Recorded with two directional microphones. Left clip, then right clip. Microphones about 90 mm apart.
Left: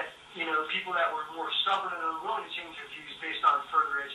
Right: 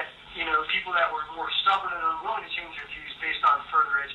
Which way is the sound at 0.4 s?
30° right (ahead or behind).